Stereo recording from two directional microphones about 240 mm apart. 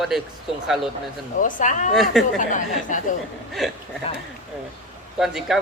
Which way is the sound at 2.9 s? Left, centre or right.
Left.